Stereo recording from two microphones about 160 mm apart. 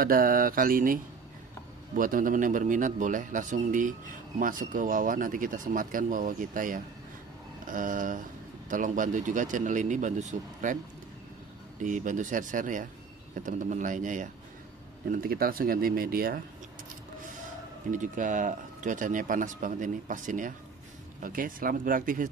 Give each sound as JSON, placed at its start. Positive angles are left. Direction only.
{"t": 0.0, "sound": "a man's voice", "side_deg": -65}
{"t": 11.8, "sound": "a man's voice", "side_deg": -50}
{"t": 15.0, "sound": "a man's voice", "side_deg": -65}
{"t": 17.9, "sound": "a man's voice", "side_deg": -55}